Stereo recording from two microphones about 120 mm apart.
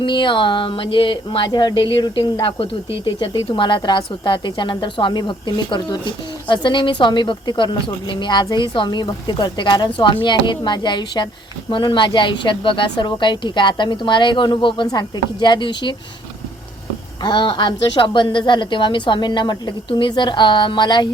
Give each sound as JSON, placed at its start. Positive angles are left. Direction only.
{"t": 0.0, "sound": "speech", "side_deg": 40}
{"t": 17.2, "sound": "speech", "side_deg": 40}